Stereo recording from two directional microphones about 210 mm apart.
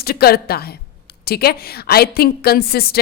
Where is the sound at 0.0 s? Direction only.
45° left (ahead or behind).